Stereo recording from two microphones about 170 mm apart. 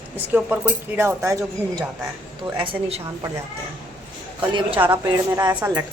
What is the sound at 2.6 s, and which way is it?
Speech, 30° right (ahead or behind).